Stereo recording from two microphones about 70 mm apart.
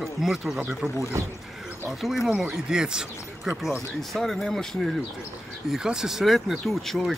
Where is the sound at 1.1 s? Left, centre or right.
Right.